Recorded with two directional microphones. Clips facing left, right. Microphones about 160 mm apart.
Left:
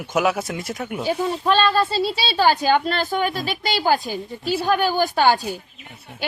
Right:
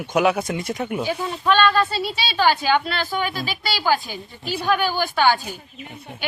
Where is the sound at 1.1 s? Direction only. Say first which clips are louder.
Left 3 dB; 35° left (ahead or behind).